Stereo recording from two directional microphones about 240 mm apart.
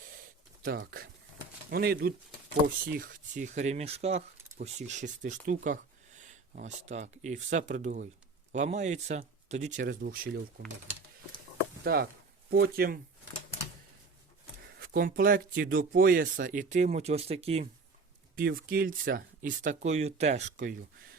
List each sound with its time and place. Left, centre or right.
0.6 s speech: right
11.8 s speech: right
14.7 s speech: right
18.3 s speech: right